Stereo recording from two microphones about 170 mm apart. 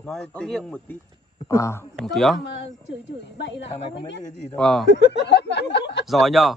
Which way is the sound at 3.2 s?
90° left.